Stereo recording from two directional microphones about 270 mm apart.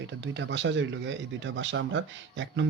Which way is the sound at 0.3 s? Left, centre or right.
Right.